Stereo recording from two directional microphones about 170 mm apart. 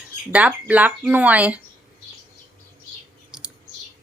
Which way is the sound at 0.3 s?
10° right (ahead or behind).